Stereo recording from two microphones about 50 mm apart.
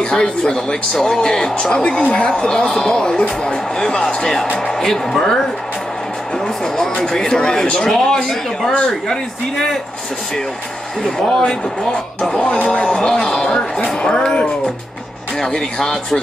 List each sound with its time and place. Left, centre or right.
0.0 s speech: centre
11.0 s speech: centre
15.3 s speech: centre